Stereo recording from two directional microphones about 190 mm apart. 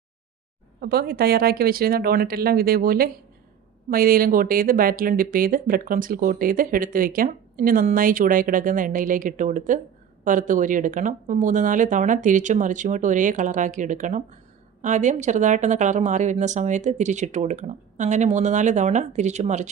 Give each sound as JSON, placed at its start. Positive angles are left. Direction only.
{"t": 0.8, "sound": "a woman's voice", "side_deg": -55}